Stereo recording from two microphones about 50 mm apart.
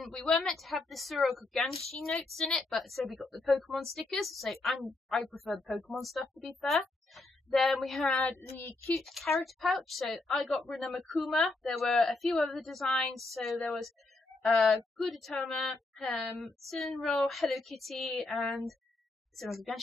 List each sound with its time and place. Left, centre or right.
0.1 s a woman's voice: centre
0.4 s a woman's voice: centre
8.1 s speech: left
9.0 s a woman's voice: centre